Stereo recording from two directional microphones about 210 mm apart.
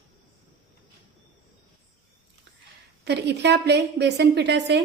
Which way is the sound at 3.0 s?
55° right (ahead or behind).